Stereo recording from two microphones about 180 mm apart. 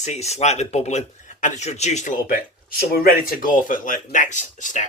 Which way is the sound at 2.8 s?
55° left (ahead or behind).